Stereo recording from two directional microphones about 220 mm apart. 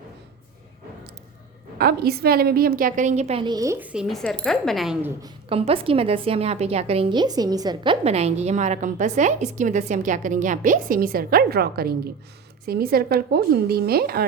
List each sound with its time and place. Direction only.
1.8 s a woman's voice: 45° right (ahead or behind); by 5.1 s centre (ahead or behind)
5.2 s a woman's voice: 25° right (ahead or behind); by 14.3 s 45° right (ahead or behind)